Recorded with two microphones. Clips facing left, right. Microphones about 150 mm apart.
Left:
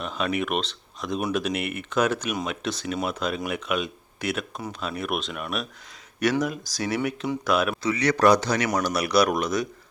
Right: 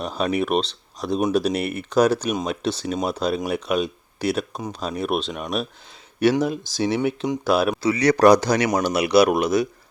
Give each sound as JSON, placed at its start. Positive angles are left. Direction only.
{"t": 0.0, "sound": "speech", "side_deg": -35}
{"t": 8.8, "sound": "speech", "side_deg": -25}